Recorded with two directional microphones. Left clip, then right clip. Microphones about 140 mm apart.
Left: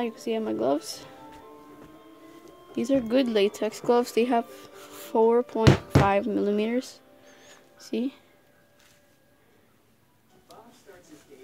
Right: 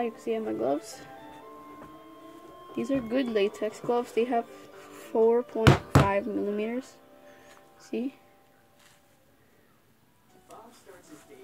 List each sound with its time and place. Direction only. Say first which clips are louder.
0.0 s a woman's voice: left 1 dB; 25° left (ahead or behind)
2.7 s a woman's voice: left 5 dB; 30° left (ahead or behind)
7.7 s speech: left 3 dB; 25° left (ahead or behind)